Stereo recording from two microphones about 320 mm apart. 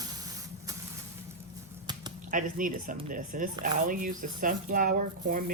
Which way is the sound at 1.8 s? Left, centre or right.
Centre.